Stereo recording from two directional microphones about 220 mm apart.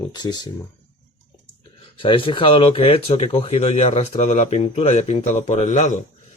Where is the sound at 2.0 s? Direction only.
25° left (ahead or behind).